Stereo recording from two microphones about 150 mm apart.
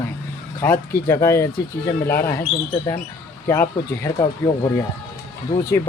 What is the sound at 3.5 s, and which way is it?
Speech, 20° left (ahead or behind).